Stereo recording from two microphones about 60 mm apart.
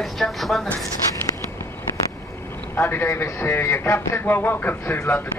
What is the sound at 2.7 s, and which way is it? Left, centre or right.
A man's voice, left.